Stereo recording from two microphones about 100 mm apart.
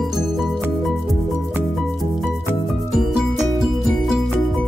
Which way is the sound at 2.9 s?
5° right (ahead or behind).